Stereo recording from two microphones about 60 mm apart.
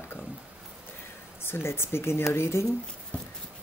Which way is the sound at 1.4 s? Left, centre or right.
Left.